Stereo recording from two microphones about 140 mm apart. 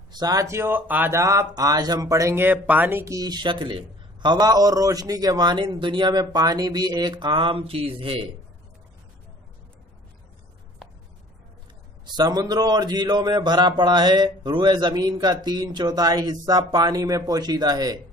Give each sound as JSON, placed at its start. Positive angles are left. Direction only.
{"t": 0.1, "sound": "speech", "side_deg": -30}
{"t": 12.1, "sound": "speech", "side_deg": -30}